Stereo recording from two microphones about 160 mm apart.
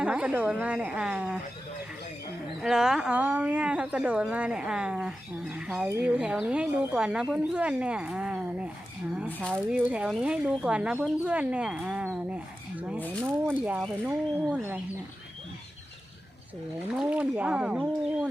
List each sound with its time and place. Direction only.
0.0 s speech: 10° right (ahead or behind)
2.6 s speech: 5° right (ahead or behind)
13.7 s speech: centre (ahead or behind)
16.9 s speech: 5° right (ahead or behind)